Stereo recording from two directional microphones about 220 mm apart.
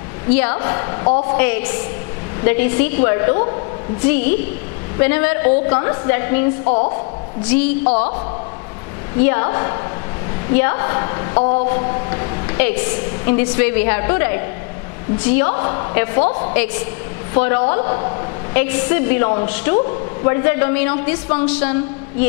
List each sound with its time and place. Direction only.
0.3 s a woman's voice: 10° left (ahead or behind)
6.6 s a woman's voice: 30° left (ahead or behind)
7.4 s a woman's voice: 10° left (ahead or behind)
7.8 s a woman's voice: 30° left (ahead or behind)
9.2 s a woman's voice: 10° left (ahead or behind)
16.3 s a woman's voice: 30° left (ahead or behind)
17.3 s a woman's voice: 10° left (ahead or behind)